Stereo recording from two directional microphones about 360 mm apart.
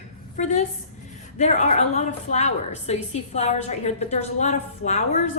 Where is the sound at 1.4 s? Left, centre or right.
Centre.